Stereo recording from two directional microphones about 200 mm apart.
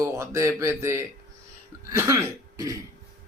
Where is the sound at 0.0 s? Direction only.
15° right (ahead or behind).